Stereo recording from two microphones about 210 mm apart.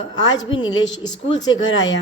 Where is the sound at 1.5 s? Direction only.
65° left (ahead or behind).